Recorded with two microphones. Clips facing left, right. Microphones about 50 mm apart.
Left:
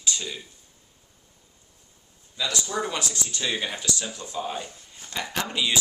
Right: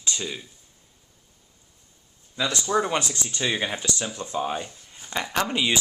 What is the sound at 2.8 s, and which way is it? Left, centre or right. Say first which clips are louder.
Speech: right 7 dB; right.